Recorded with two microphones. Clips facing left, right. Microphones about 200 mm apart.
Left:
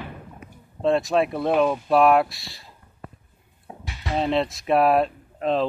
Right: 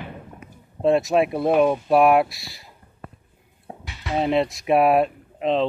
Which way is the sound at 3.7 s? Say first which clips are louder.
Right 2 dB; 35° right (ahead or behind).